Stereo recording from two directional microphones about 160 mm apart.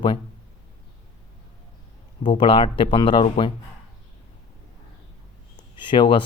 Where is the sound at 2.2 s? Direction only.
30° left (ahead or behind).